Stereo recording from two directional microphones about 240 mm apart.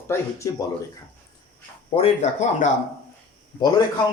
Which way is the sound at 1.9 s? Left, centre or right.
Left.